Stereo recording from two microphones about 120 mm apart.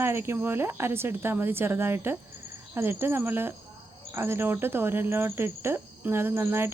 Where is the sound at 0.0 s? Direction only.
20° right (ahead or behind).